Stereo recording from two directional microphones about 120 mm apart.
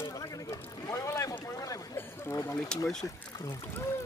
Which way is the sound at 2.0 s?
20° left (ahead or behind).